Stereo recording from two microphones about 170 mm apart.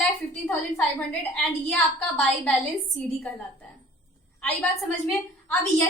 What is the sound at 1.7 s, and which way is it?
Speech, 5° left (ahead or behind).